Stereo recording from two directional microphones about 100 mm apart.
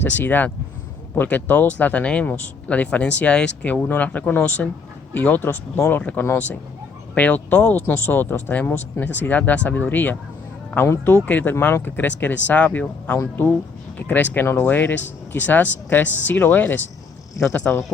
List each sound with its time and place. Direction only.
0.0 s speech: 20° left (ahead or behind)